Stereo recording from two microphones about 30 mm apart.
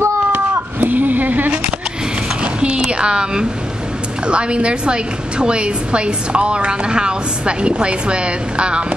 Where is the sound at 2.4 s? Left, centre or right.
Right.